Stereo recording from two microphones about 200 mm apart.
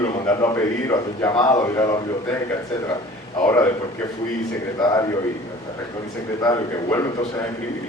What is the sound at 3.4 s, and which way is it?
Speech, 15° left (ahead or behind).